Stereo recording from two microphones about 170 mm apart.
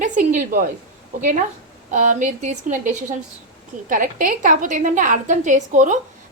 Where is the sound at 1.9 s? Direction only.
50° right (ahead or behind).